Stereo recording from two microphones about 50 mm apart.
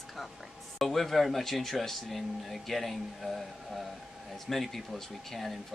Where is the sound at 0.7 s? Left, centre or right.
Centre.